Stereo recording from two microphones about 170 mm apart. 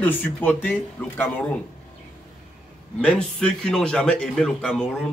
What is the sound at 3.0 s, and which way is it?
A man's voice, 5° left (ahead or behind).